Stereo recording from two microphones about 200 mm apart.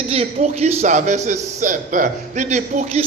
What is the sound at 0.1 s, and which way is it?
Speech, 30° right (ahead or behind).